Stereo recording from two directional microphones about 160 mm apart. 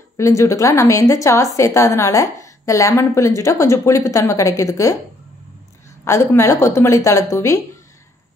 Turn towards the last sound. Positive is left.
turn(degrees=20)  # may be behind; listen again after turning